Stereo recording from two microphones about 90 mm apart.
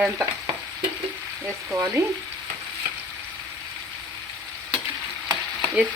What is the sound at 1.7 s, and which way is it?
Frying, 35° right (ahead or behind).